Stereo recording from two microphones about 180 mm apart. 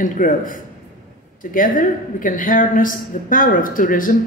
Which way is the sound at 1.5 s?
50° left (ahead or behind).